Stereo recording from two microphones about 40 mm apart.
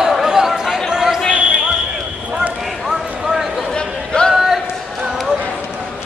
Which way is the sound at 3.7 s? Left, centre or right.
Left.